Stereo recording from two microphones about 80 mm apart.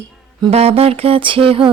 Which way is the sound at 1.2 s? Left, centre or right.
Right.